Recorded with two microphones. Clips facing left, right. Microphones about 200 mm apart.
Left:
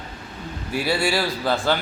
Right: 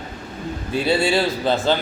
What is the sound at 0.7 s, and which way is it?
A man's voice, 20° right (ahead or behind).